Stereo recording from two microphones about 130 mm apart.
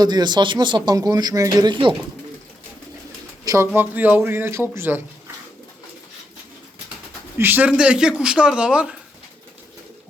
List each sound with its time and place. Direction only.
0.0 s speech: 35° right (ahead or behind)
3.4 s a sound: 25° right (ahead or behind)
3.8 s speech: 15° right (ahead or behind)
7.3 s speech: 15° right (ahead or behind)